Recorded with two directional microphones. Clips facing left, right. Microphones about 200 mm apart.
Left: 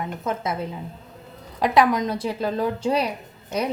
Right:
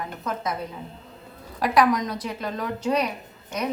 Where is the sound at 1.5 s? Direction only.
25° left (ahead or behind).